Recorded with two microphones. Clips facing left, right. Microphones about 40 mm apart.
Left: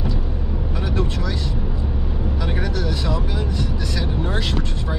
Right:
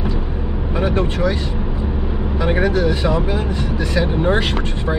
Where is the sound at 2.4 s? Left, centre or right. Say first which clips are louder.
Right 11 dB; right.